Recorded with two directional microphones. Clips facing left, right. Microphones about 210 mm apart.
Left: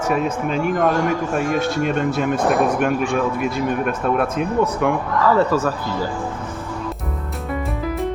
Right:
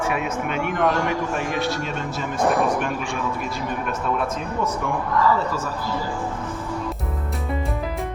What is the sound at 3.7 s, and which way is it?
Speech, 55° left (ahead or behind).